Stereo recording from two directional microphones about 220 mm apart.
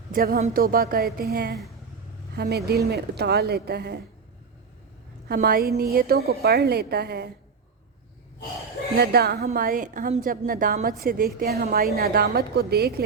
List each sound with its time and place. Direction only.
0.1 s a woman's voice: 45° right (ahead or behind)
5.3 s a woman's voice: 45° right (ahead or behind)
9.0 s a woman's voice: 45° right (ahead or behind)